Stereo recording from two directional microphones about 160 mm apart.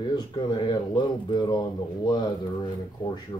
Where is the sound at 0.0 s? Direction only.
25° left (ahead or behind).